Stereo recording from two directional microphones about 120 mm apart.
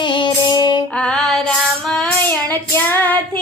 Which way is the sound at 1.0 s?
5° left (ahead or behind).